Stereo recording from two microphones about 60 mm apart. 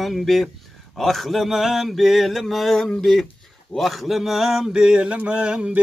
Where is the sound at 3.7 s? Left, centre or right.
Centre.